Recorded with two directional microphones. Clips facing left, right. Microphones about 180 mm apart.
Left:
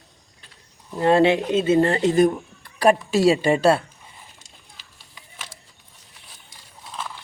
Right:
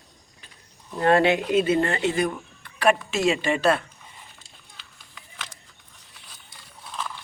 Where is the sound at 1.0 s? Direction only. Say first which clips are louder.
Left 3 dB; 25° left (ahead or behind).